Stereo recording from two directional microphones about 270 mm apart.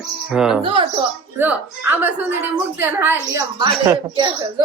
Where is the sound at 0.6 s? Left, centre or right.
Centre.